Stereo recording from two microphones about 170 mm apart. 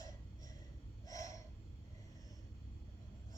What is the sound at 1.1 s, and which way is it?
Snort, 20° left (ahead or behind).